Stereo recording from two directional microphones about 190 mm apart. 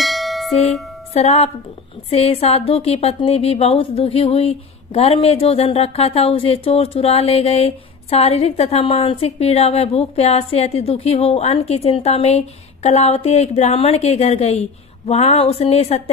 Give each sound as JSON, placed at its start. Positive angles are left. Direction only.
{"t": 0.0, "sound": "music", "side_deg": 0}
{"t": 1.1, "sound": "a woman's voice", "side_deg": 35}